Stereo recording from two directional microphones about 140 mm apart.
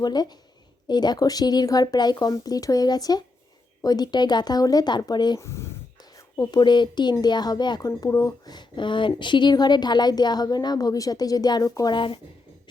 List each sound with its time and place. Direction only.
0.0 s speech: 30° left (ahead or behind)
5.4 s speech: 20° left (ahead or behind); by 12.2 s 35° left (ahead or behind)